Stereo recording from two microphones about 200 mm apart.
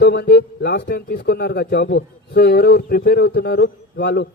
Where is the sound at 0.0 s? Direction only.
50° left (ahead or behind).